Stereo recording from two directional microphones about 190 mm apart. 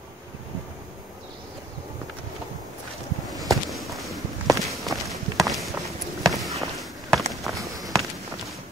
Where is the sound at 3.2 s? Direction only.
Centre (ahead or behind).